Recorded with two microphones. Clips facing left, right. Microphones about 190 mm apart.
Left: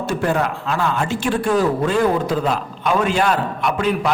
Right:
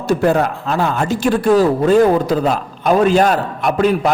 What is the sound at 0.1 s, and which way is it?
Speech, 35° right (ahead or behind).